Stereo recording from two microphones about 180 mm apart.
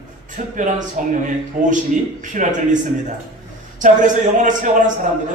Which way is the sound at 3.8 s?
45° right (ahead or behind).